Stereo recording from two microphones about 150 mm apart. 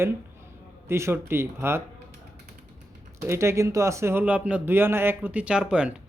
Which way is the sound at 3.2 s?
20° right (ahead or behind).